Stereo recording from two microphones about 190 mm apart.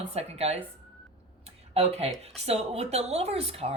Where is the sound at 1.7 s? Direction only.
30° right (ahead or behind).